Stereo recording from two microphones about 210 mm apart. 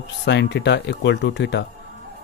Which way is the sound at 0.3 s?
55° left (ahead or behind).